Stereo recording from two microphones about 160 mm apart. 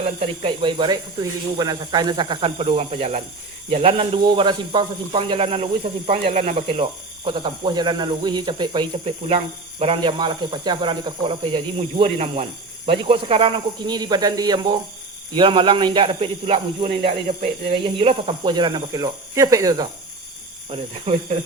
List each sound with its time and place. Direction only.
0.0 s speech: 35° right (ahead or behind)
7.3 s speech: 30° right (ahead or behind)
20.7 s speech: 40° right (ahead or behind)